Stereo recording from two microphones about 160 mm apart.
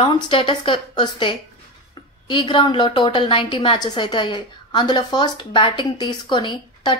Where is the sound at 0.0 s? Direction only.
30° left (ahead or behind).